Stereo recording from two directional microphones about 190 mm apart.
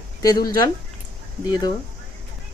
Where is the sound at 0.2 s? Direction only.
20° left (ahead or behind).